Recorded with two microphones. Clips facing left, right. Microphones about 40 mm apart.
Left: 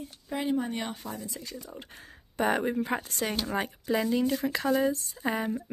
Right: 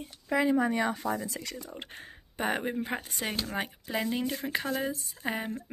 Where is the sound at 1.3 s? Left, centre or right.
Right.